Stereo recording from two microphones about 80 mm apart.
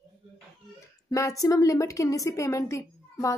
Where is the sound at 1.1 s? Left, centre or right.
Left.